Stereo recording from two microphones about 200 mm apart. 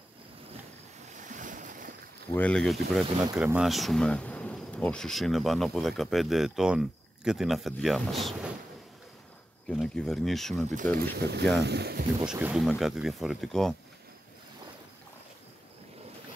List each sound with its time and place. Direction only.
1.3 s waves: 40° right (ahead or behind)
2.3 s speech: 5° left (ahead or behind)
9.7 s speech: 5° left (ahead or behind)
11.0 s speech: 55° right (ahead or behind)
12.3 s speech: 5° right (ahead or behind)